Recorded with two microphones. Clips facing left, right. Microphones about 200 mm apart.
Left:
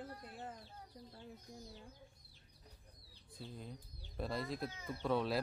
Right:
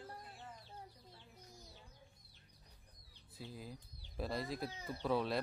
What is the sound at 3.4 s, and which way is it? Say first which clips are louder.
Speech: even; 5° right (ahead or behind).